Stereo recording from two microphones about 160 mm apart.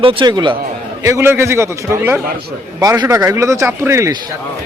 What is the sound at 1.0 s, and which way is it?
A man's voice, 15° right (ahead or behind).